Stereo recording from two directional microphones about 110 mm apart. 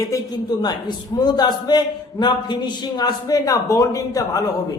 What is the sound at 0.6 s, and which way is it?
A man's voice, 40° left (ahead or behind).